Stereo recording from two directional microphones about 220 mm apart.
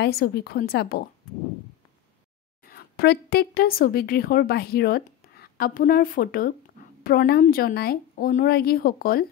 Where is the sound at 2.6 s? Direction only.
40° left (ahead or behind).